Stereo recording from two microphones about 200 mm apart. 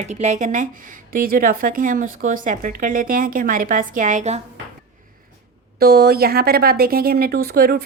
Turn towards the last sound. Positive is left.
turn(degrees=-50)  # may be behind; listen again after turning